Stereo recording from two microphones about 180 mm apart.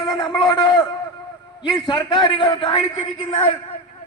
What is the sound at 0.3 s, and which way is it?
A man's voice, 25° left (ahead or behind).